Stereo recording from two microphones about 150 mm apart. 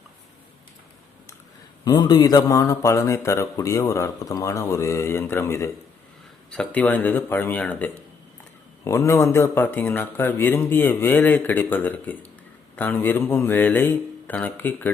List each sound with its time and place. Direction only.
1.8 s speech: 25° left (ahead or behind)
6.5 s speech: 5° left (ahead or behind)